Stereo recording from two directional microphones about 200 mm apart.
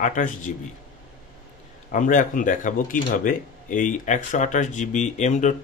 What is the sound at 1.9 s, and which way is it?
Speech, 40° left (ahead or behind).